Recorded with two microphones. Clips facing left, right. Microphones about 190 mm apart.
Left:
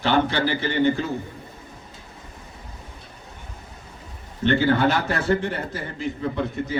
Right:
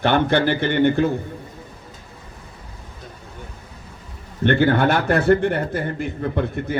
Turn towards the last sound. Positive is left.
turn(degrees=-55)  # may be behind; listen again after turning